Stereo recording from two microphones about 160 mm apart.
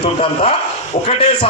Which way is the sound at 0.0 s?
40° left (ahead or behind).